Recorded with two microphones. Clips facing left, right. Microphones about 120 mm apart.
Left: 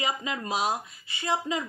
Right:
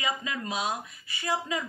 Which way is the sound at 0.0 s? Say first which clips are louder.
Left 2 dB; 25° left (ahead or behind).